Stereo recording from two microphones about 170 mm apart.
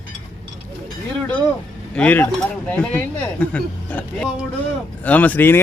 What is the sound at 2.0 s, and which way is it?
Speech, 10° left (ahead or behind).